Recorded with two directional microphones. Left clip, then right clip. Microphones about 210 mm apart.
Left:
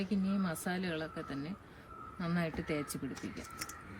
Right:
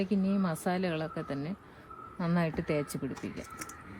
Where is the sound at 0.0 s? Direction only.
30° right (ahead or behind).